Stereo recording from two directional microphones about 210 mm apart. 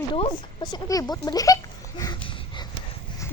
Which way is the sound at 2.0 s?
20° left (ahead or behind).